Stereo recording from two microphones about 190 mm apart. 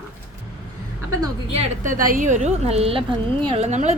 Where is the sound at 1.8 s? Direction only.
45° right (ahead or behind).